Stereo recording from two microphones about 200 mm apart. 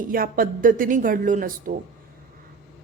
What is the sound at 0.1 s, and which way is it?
A woman's voice, 45° right (ahead or behind).